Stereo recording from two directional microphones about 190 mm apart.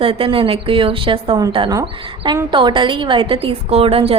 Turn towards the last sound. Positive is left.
turn(degrees=-30)  # may be behind; listen again after turning